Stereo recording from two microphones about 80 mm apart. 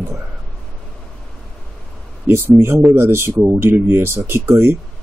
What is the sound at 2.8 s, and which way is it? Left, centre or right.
Speech, right.